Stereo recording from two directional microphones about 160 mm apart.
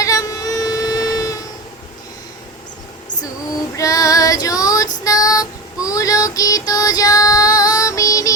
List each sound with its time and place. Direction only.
0.0 s a sound: 20° left (ahead or behind)
3.8 s child singing: 20° left (ahead or behind)
5.0 s female singing: 20° left (ahead or behind)